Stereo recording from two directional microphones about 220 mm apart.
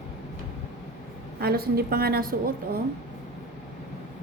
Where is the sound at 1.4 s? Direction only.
45° right (ahead or behind).